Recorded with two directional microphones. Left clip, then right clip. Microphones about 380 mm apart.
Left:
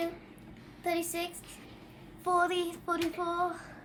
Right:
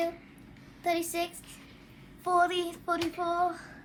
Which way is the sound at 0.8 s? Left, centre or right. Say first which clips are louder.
Right 3 dB; centre.